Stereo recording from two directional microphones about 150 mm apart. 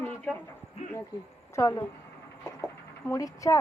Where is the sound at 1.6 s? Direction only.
25° left (ahead or behind).